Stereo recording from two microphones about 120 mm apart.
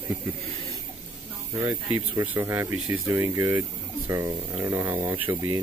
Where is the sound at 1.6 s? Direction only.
25° right (ahead or behind).